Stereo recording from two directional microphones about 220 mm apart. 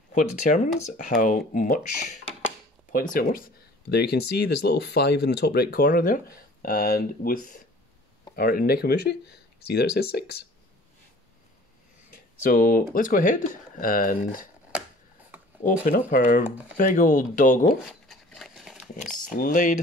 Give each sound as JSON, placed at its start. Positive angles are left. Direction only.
{"t": 0.1, "sound": "speech", "side_deg": 35}
{"t": 12.1, "sound": "speech", "side_deg": 40}
{"t": 15.6, "sound": "speech", "side_deg": 35}
{"t": 18.0, "sound": "a sound", "side_deg": 0}
{"t": 19.3, "sound": "speech", "side_deg": 35}